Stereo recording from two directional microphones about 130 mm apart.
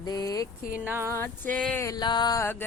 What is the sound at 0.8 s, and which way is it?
Speech, 15° right (ahead or behind).